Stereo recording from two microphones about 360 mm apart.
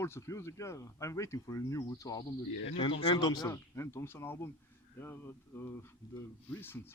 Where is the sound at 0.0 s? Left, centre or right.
Centre.